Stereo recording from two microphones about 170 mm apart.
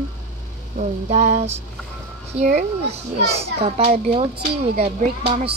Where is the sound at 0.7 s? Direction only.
45° right (ahead or behind).